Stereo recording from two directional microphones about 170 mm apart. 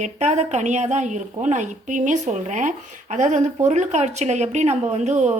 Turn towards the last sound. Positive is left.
turn(degrees=-45)  # may be behind; listen again after turning